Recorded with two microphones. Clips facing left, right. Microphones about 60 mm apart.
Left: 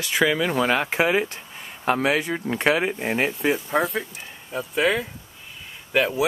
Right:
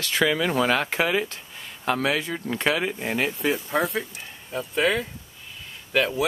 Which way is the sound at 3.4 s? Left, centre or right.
Centre.